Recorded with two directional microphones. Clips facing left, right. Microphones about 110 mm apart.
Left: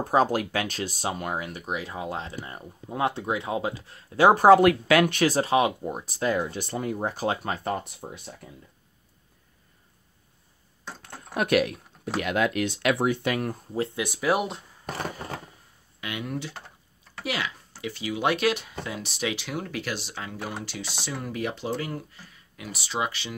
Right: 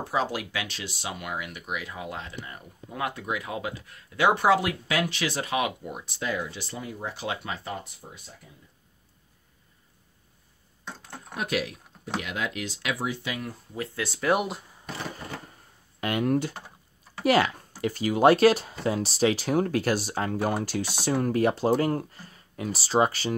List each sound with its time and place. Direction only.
0.0 s speech: 45° left (ahead or behind)
4.6 s speech: 60° left (ahead or behind)
5.2 s speech: 35° left (ahead or behind); by 8.4 s 60° left (ahead or behind)
11.3 s speech: 60° left (ahead or behind)
13.9 s speech: 15° left (ahead or behind)
14.3 s speech: centre (ahead or behind)
14.9 s a sound: 50° left (ahead or behind)
16.0 s speech: 45° right (ahead or behind)